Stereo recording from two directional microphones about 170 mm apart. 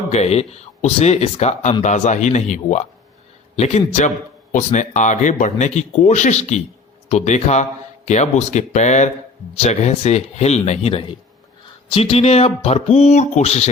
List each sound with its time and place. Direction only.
0.1 s speech: 40° left (ahead or behind)